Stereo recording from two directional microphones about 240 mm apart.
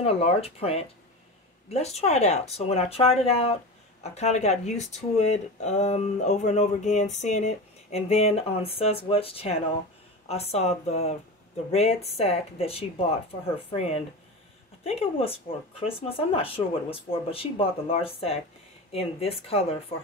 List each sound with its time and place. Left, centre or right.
0.0 s speech: left